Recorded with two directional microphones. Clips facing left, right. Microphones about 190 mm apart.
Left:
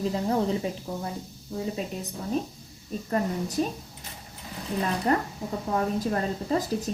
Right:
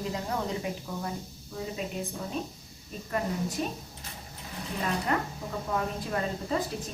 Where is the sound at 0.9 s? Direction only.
30° left (ahead or behind).